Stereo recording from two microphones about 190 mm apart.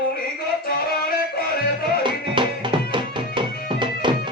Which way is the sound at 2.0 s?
25° right (ahead or behind).